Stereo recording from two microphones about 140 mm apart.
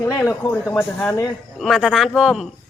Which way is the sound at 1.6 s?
Centre (ahead or behind).